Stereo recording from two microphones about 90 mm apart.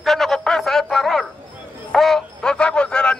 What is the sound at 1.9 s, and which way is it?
Music, 5° left (ahead or behind).